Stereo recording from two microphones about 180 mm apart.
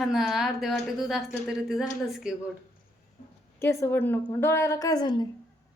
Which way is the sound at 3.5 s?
15° left (ahead or behind).